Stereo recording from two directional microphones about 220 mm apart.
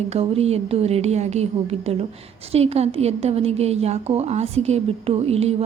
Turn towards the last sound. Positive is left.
turn(degrees=-30)  # may be behind; listen again after turning